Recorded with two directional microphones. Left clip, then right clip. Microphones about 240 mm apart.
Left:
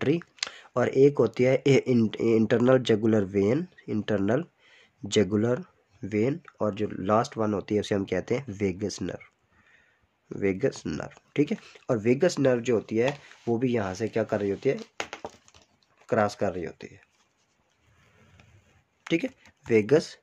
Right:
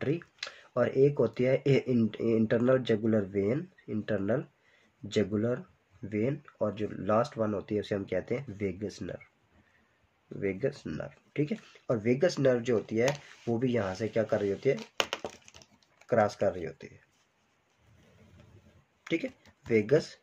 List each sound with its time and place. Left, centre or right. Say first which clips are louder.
0.0 s speech: left 6 dB; left
10.4 s speech: left 5 dB; left
16.1 s speech: left 1 dB; left
19.0 s speech: left 5 dB; left